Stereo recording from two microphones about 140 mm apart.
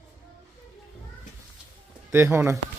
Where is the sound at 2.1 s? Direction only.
15° right (ahead or behind).